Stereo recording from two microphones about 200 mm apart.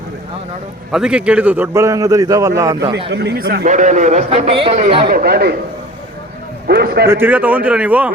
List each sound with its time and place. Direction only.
0.9 s a man's voice: 5° right (ahead or behind)
3.1 s a man's voice: 55° right (ahead or behind); by 5.0 s 30° right (ahead or behind)
5.0 s speech: 50° right (ahead or behind)
6.7 s speech: 55° right (ahead or behind)
7.1 s a man's voice: 10° right (ahead or behind)